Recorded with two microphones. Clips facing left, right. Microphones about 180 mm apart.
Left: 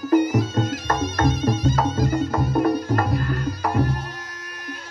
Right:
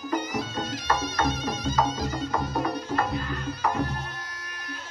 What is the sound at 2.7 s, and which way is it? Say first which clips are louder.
Music: left 5 dB; 10° left (ahead or behind).